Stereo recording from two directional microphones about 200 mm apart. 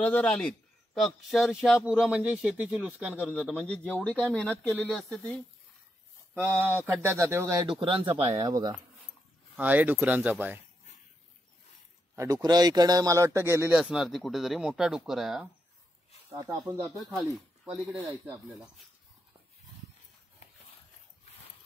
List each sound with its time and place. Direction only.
0.0 s speech: 5° left (ahead or behind)
3.2 s speech: 10° left (ahead or behind)
6.3 s speech: 10° right (ahead or behind)
7.8 s speech: 25° right (ahead or behind)
9.6 s speech: 10° right (ahead or behind)
12.2 s speech: 20° right (ahead or behind)
13.7 s speech: centre (ahead or behind)
16.3 s speech: 15° right (ahead or behind)
17.0 s speech: centre (ahead or behind)